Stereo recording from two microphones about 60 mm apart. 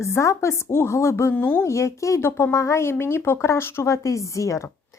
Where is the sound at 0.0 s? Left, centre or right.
Left.